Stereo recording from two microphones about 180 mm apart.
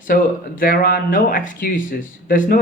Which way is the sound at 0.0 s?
50° left (ahead or behind).